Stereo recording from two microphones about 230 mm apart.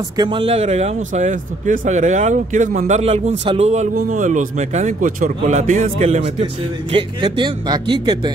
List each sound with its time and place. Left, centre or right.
0.2 s speech: right
6.9 s speech: right